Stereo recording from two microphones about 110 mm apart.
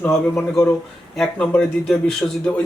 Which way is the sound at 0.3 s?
5° left (ahead or behind).